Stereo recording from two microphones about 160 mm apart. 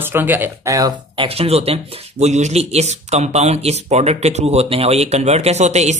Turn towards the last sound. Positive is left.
turn(degrees=-45)  # may be behind; listen again after turning